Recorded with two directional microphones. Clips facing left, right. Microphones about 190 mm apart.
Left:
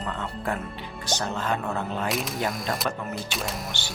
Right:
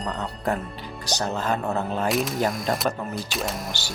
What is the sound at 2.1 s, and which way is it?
Speech, centre (ahead or behind).